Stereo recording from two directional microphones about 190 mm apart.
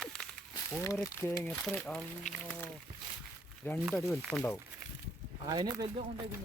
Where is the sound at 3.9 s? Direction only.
Centre (ahead or behind).